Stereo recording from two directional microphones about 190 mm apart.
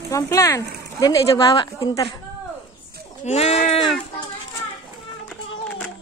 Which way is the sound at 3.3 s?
35° left (ahead or behind).